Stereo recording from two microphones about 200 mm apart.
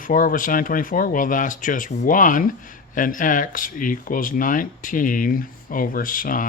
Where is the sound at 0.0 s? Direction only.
45° left (ahead or behind).